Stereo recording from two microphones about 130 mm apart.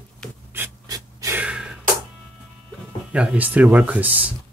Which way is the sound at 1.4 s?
5° right (ahead or behind).